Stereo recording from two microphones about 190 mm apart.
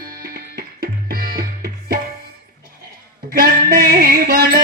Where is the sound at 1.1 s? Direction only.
50° right (ahead or behind).